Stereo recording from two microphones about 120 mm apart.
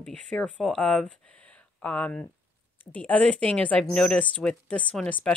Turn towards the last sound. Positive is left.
turn(degrees=10)  # may be behind; listen again after turning